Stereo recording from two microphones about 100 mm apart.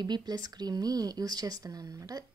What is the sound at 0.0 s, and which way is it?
Speech, 45° right (ahead or behind).